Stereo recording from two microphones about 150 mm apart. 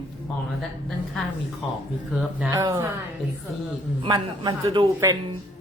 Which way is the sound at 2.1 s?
5° right (ahead or behind).